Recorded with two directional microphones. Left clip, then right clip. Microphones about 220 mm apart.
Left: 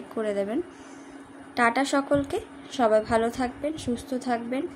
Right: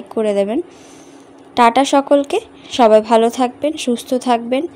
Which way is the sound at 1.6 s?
30° right (ahead or behind).